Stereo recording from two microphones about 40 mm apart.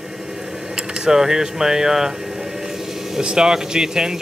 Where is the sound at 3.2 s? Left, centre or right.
Centre.